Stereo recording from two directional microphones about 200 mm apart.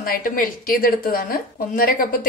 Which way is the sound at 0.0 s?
45° left (ahead or behind).